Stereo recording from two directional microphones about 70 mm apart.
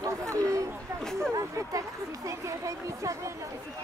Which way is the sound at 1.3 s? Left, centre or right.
Right.